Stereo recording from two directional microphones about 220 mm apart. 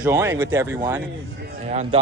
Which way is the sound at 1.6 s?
30° right (ahead or behind).